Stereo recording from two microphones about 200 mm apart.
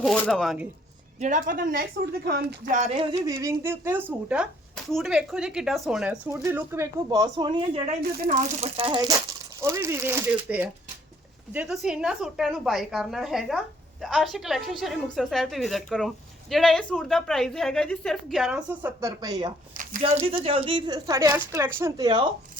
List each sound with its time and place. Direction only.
0.0 s a woman's voice: centre (ahead or behind)
1.2 s speech: 40° right (ahead or behind)
3.2 s speech: 15° right (ahead or behind)
7.9 s a woman's voice: 35° right (ahead or behind); by 18.6 s centre (ahead or behind)
18.8 s speech: 15° right (ahead or behind)
19.7 s a sound: 40° right (ahead or behind)
20.0 s speech: 30° right (ahead or behind)